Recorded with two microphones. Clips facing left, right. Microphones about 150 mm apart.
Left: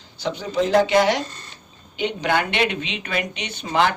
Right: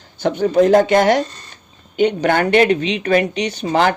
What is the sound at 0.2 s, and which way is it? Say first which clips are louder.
Speech: right 9 dB; 55° right (ahead or behind).